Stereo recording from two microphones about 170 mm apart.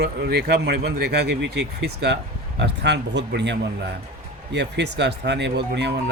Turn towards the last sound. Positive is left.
turn(degrees=-80)